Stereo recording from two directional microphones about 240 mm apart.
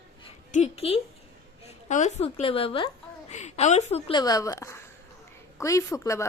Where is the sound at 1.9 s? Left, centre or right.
Left.